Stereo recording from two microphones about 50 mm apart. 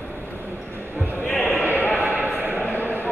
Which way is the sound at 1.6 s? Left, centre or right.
Left.